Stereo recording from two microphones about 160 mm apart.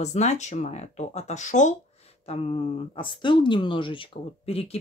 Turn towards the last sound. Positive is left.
turn(degrees=40)  # may be behind; listen again after turning